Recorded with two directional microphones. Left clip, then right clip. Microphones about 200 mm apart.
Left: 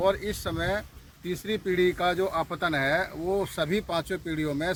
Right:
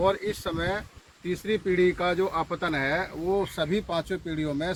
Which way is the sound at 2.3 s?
40° left (ahead or behind).